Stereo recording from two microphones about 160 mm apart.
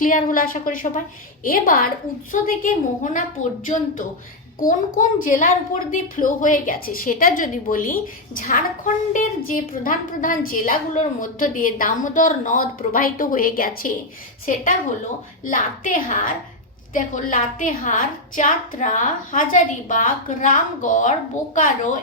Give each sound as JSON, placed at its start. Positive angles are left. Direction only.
{"t": 0.0, "sound": "a woman's voice", "side_deg": 60}
{"t": 4.6, "sound": "a woman's voice", "side_deg": 55}